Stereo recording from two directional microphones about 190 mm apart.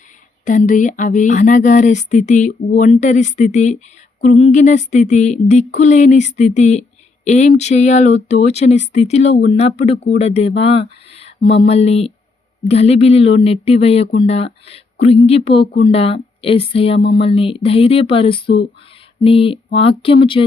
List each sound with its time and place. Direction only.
0.4 s speech: 40° left (ahead or behind); by 20.4 s 25° left (ahead or behind)